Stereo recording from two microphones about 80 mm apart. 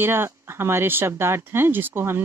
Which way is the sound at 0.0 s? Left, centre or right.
Right.